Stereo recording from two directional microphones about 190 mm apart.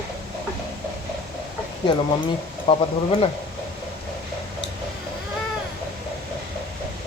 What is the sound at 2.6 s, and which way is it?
Speech, 30° left (ahead or behind).